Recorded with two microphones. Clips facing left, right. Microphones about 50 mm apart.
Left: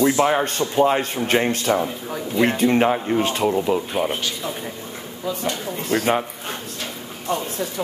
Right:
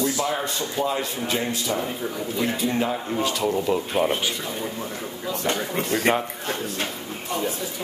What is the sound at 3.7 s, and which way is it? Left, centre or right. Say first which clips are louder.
Speech: even; centre.